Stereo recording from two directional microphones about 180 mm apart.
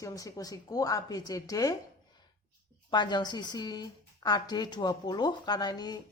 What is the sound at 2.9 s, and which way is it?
Speech, 25° left (ahead or behind).